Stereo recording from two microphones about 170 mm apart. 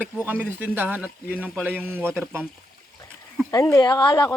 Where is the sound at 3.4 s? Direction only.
20° left (ahead or behind).